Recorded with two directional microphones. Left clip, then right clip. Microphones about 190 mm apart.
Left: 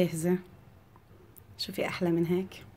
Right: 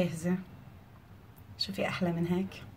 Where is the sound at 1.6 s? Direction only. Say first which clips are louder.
Left 1 dB; 40° left (ahead or behind).